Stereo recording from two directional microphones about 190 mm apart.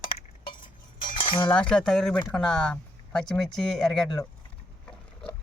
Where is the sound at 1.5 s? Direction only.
5° left (ahead or behind).